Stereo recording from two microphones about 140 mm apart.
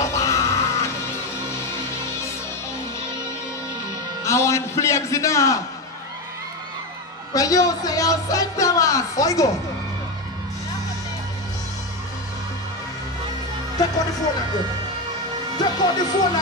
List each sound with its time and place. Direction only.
0.0 s music: 20° left (ahead or behind)
4.2 s speech: 20° left (ahead or behind)
7.3 s speech: 25° left (ahead or behind)
15.5 s speech: 30° left (ahead or behind)